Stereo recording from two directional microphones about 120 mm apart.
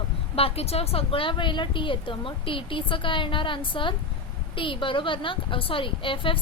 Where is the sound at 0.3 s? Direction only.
55° left (ahead or behind).